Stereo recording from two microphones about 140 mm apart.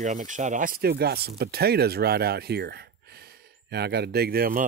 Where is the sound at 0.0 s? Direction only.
65° right (ahead or behind); by 0.9 s 90° right.